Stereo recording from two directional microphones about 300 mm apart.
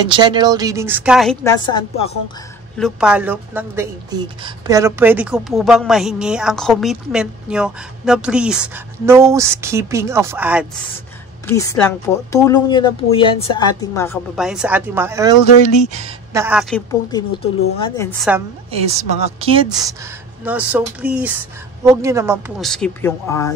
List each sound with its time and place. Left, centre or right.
0.0 s speech: centre
1.6 s speech: centre
2.8 s a woman's voice: centre
11.4 s speech: centre
14.3 s a woman's voice: centre
15.4 s speech: left
16.3 s a woman's voice: centre
17.1 s speech: centre
18.7 s a woman's voice: centre
20.4 s a woman's voice: centre
22.7 s speech: centre